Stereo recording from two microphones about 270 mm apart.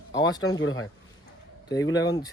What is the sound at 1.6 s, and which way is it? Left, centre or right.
Speech, centre.